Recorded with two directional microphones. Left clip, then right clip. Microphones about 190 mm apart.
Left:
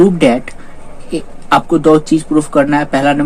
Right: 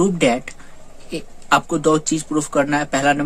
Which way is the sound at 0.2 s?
25° right (ahead or behind).